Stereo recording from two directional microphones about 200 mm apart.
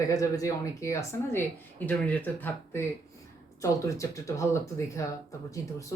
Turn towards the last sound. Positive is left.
turn(degrees=15)  # may be behind; listen again after turning